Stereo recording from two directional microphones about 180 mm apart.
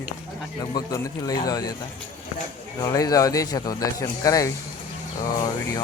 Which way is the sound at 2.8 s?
20° left (ahead or behind).